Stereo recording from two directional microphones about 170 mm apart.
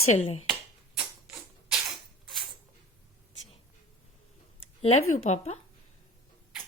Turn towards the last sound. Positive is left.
turn(degrees=40)  # may be behind; listen again after turning